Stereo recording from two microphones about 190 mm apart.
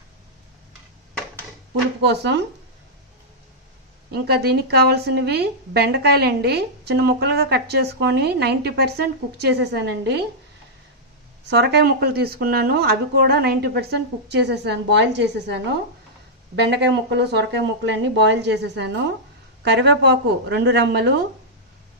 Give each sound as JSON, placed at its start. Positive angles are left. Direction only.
{"t": 2.0, "sound": "a woman's voice", "side_deg": -65}
{"t": 4.1, "sound": "a woman's voice", "side_deg": -55}
{"t": 11.4, "sound": "a woman's voice", "side_deg": -60}